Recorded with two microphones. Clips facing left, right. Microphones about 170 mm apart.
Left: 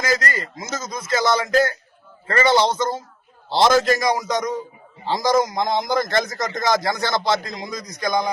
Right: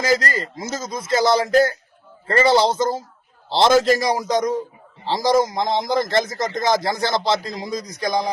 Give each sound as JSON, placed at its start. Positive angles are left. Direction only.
{"t": 0.0, "sound": "speech", "side_deg": -30}
{"t": 3.5, "sound": "a man's voice", "side_deg": 0}
{"t": 3.9, "sound": "a man's voice", "side_deg": -30}